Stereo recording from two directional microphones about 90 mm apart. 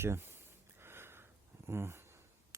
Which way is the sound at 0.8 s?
25° right (ahead or behind).